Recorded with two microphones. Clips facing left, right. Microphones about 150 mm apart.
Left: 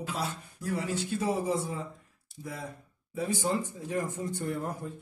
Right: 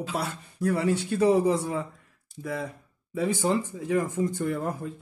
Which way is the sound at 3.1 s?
90° right.